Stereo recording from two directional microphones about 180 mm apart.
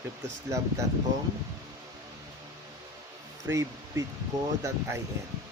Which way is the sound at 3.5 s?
15° right (ahead or behind).